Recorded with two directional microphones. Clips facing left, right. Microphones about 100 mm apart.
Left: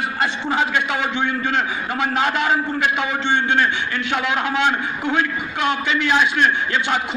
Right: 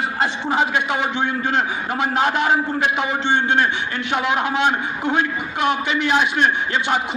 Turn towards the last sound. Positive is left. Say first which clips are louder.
# even
turn(degrees=-25)  # may be behind; listen again after turning